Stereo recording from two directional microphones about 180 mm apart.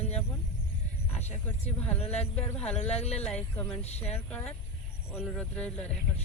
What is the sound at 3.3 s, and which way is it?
Speech, 10° left (ahead or behind).